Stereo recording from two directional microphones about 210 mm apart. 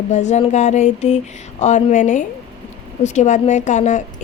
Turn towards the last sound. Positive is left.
turn(degrees=35)  # may be behind; listen again after turning